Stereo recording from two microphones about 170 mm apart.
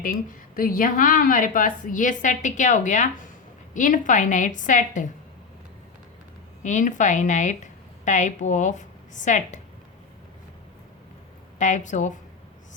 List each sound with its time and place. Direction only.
0.0 s a woman's voice: 55° left (ahead or behind)
6.6 s a woman's voice: 45° left (ahead or behind)
11.6 s a woman's voice: 45° left (ahead or behind)